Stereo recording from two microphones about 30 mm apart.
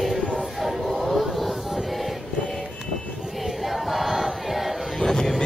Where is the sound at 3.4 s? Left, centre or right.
Centre.